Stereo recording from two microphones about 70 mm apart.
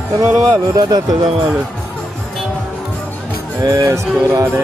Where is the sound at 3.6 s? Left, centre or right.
Right.